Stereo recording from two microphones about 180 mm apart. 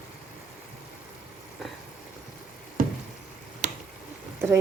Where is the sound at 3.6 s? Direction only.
45° right (ahead or behind).